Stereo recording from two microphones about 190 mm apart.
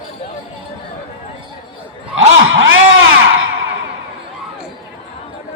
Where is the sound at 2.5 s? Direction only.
90° right.